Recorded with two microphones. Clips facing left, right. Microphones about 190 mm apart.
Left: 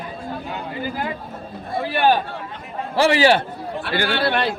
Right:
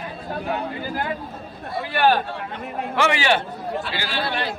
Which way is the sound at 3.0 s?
35° left (ahead or behind).